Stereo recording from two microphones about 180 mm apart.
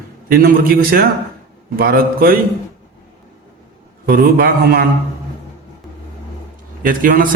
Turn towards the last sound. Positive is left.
turn(degrees=-50)  # may be behind; listen again after turning